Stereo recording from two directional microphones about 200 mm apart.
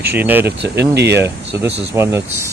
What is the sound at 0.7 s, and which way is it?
Speech, 55° right (ahead or behind).